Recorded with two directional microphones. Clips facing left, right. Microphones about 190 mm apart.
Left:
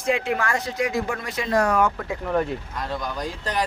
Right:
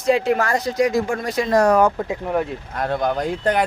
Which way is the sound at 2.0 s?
20° right (ahead or behind).